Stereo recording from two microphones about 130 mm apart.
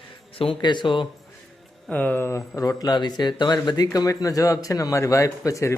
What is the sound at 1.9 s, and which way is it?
A man's voice, 10° left (ahead or behind).